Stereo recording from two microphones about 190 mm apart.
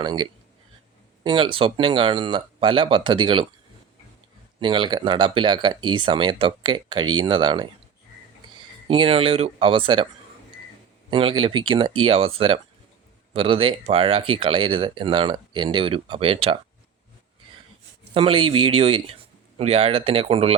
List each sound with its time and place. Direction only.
0.0 s speech: 25° right (ahead or behind)
4.6 s speech: 25° right (ahead or behind)
8.9 s speech: 30° right (ahead or behind)
11.1 s speech: 25° right (ahead or behind)
18.1 s speech: 30° right (ahead or behind)